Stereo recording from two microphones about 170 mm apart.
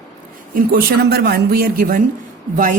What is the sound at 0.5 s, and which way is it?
A woman's voice, 60° right (ahead or behind).